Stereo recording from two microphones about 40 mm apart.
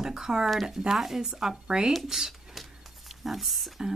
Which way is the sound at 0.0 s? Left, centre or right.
Centre.